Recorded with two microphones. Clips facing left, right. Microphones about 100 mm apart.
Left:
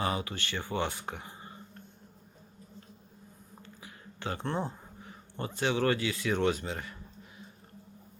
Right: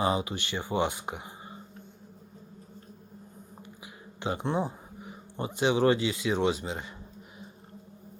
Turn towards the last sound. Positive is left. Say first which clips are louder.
# right 1 dB
turn(degrees=-20)  # may be behind; listen again after turning